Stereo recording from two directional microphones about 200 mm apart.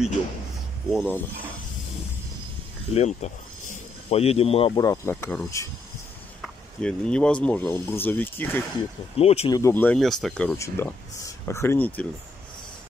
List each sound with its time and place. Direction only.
0.8 s speech: centre (ahead or behind)
2.9 s speech: 35° left (ahead or behind); by 8.6 s 10° left (ahead or behind)
9.1 s speech: 30° left (ahead or behind)
9.5 s speech: 15° left (ahead or behind)